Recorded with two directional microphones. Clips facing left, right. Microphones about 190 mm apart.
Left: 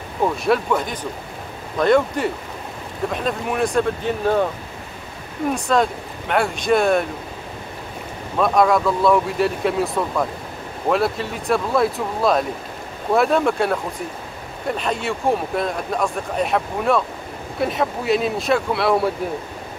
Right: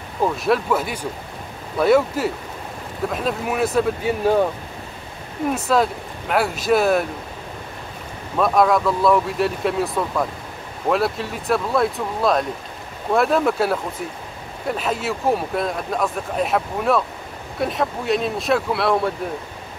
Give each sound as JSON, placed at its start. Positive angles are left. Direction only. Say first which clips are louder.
{"t": 0.2, "sound": "speech", "louder": "even", "side_deg": 0}
{"t": 5.5, "sound": "speech", "louder": "even", "side_deg": -5}
{"t": 8.4, "sound": "speech", "louder": "even", "side_deg": 0}